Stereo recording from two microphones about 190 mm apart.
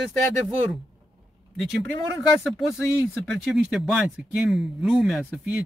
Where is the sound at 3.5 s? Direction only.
Centre (ahead or behind).